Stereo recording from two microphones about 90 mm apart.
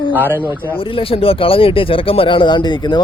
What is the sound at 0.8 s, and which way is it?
Speech, 85° left.